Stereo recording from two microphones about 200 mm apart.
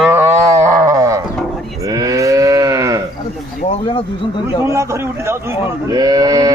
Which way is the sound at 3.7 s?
25° left (ahead or behind).